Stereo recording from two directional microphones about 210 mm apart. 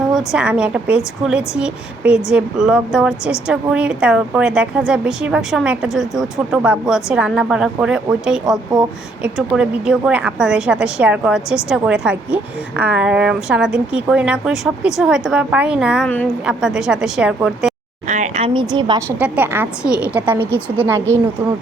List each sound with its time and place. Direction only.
0.1 s a woman's voice: centre (ahead or behind)
16.0 s a woman's voice: 5° left (ahead or behind)
18.1 s a woman's voice: 30° right (ahead or behind); by 21.0 s 10° right (ahead or behind)